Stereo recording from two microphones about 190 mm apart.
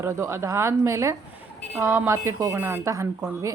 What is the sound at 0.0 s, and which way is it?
A woman's voice, 15° right (ahead or behind).